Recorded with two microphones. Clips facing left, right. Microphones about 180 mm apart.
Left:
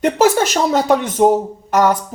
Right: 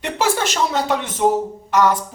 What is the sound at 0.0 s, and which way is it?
Speech, 45° left (ahead or behind).